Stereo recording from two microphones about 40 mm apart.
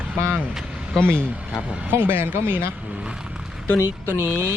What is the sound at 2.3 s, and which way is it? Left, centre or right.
Speech, right.